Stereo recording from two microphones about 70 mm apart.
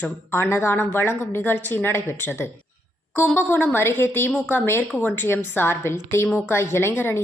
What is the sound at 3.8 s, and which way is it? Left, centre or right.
A woman's voice, left.